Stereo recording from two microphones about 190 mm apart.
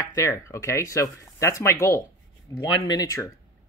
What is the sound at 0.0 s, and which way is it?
Speech, 15° left (ahead or behind).